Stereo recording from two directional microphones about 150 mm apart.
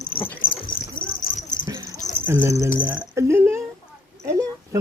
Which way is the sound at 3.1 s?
20° right (ahead or behind).